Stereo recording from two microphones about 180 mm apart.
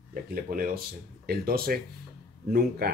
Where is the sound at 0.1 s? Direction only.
55° right (ahead or behind).